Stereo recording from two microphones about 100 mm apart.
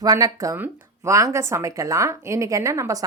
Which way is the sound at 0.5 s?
25° right (ahead or behind).